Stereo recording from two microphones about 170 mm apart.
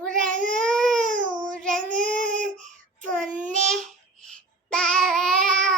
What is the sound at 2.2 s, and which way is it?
Child singing, 50° right (ahead or behind).